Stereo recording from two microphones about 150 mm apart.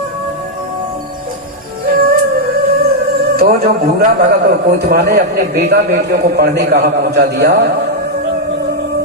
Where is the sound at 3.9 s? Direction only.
90° right.